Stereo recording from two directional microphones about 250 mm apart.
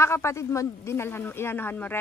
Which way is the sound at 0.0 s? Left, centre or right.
Centre.